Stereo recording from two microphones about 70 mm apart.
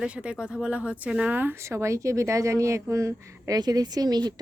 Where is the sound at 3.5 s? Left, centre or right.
Right.